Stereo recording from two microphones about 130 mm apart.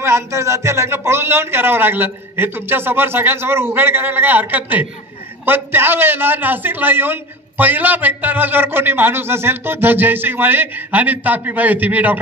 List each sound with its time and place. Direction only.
0.0 s a man's voice: 20° right (ahead or behind)